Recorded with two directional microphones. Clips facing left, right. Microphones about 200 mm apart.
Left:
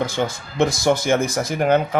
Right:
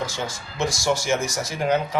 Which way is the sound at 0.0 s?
55° left (ahead or behind).